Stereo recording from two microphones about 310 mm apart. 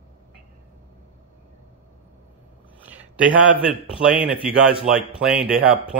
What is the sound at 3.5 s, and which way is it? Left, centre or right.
Speech, centre.